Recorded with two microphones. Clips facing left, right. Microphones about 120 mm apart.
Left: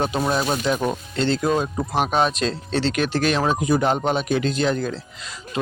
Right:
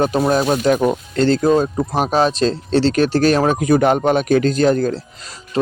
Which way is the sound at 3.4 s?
55° right (ahead or behind).